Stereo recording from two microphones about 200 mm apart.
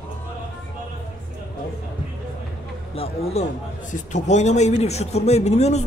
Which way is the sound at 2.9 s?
30° left (ahead or behind).